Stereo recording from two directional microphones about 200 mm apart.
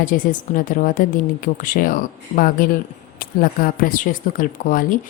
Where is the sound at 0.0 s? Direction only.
40° left (ahead or behind).